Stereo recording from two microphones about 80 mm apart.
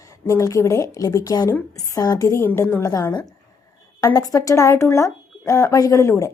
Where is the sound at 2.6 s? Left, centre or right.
Left.